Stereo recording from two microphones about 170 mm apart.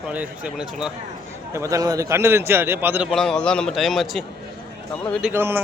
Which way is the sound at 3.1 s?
5° left (ahead or behind).